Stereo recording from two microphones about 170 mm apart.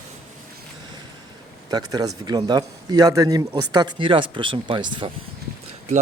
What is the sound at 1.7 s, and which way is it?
Speech, 25° right (ahead or behind).